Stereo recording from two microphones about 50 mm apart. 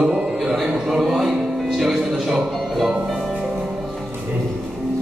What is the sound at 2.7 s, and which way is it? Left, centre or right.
Music, centre.